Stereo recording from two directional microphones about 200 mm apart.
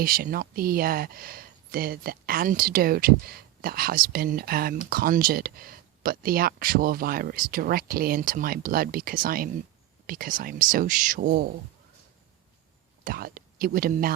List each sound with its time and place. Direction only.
0.0 s speech: 45° right (ahead or behind)
13.1 s speech: 45° right (ahead or behind)